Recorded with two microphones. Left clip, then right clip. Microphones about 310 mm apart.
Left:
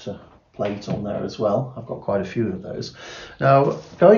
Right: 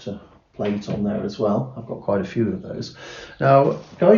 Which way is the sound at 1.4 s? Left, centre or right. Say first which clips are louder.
Left 1 dB; centre.